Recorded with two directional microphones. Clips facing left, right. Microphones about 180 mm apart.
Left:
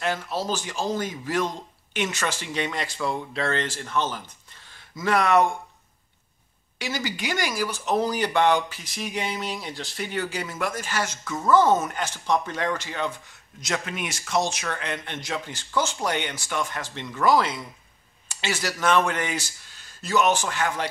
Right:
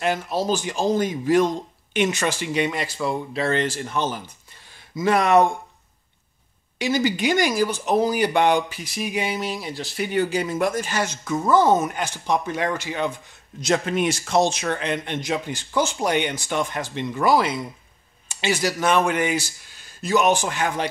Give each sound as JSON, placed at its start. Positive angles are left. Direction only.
{"t": 0.0, "sound": "a man's voice", "side_deg": -15}
{"t": 6.8, "sound": "speech", "side_deg": -20}
{"t": 13.6, "sound": "a man's voice", "side_deg": -30}